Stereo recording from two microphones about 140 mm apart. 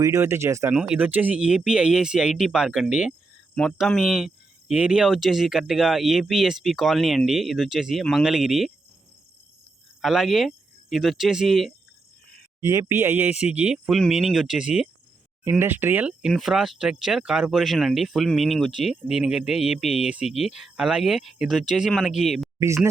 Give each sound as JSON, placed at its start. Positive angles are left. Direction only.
{"t": 0.0, "sound": "speech", "side_deg": -20}
{"t": 0.8, "sound": "speech", "side_deg": -10}
{"t": 3.5, "sound": "speech", "side_deg": 5}
{"t": 10.0, "sound": "speech", "side_deg": 0}
{"t": 12.5, "sound": "a sound", "side_deg": -15}
{"t": 12.9, "sound": "speech", "side_deg": -15}
{"t": 22.6, "sound": "speech", "side_deg": -20}